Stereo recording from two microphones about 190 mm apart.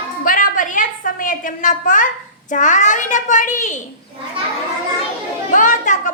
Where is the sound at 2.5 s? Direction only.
40° left (ahead or behind).